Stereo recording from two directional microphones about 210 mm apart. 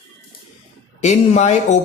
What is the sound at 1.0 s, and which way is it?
Speech, 35° left (ahead or behind).